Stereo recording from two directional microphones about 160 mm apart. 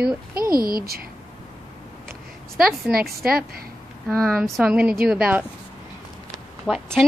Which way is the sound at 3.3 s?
70° right (ahead or behind).